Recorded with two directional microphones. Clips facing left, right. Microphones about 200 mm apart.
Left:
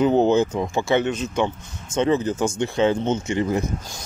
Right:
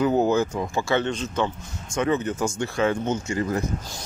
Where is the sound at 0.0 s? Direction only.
25° left (ahead or behind).